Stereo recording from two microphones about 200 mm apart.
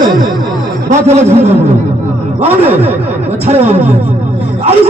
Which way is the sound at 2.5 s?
10° right (ahead or behind).